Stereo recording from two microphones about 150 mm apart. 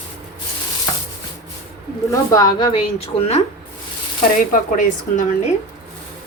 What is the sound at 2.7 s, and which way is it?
Speech, 40° left (ahead or behind).